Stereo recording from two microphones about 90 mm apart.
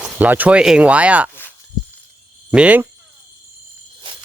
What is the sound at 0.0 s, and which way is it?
Speech, 20° right (ahead or behind).